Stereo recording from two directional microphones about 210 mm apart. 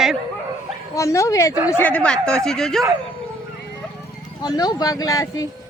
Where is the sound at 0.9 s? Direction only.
15° left (ahead or behind).